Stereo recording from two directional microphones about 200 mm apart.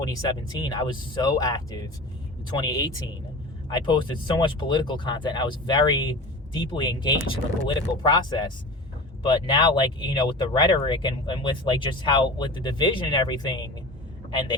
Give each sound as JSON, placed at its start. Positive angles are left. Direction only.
{"t": 0.0, "sound": "speech", "side_deg": 20}